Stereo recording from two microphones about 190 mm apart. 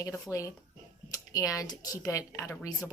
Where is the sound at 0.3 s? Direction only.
15° left (ahead or behind).